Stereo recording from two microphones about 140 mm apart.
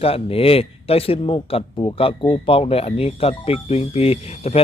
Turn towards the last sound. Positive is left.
turn(degrees=45)  # may be behind; listen again after turning